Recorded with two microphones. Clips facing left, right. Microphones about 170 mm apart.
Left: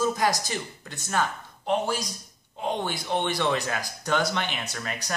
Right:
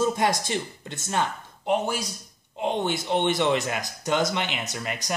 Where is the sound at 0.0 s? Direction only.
25° right (ahead or behind).